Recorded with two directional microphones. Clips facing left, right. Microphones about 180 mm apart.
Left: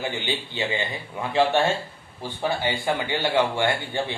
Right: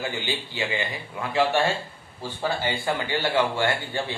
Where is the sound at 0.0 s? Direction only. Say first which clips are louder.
Left 1 dB; 20° left (ahead or behind).